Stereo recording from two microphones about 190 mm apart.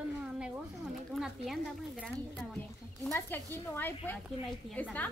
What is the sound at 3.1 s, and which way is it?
A woman's voice, 10° left (ahead or behind).